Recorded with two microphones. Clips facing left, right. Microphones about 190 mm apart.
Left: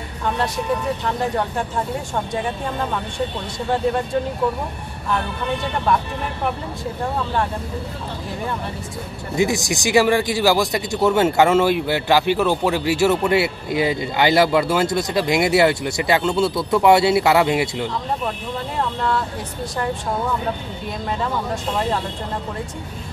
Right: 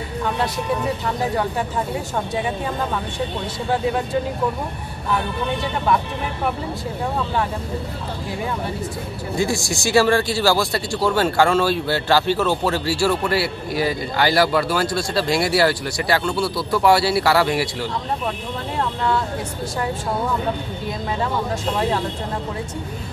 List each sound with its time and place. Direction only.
9.4 s speech: 20° left (ahead or behind)
18.8 s speech: centre (ahead or behind)